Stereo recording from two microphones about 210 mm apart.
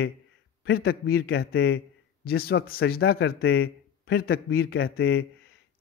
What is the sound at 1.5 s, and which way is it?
Speech, 70° left (ahead or behind).